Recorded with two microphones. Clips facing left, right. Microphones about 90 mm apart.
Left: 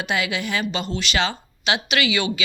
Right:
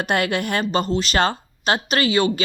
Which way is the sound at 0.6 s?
40° right (ahead or behind).